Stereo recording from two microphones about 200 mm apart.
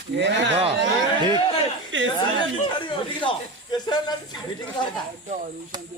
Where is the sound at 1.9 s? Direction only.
70° right (ahead or behind).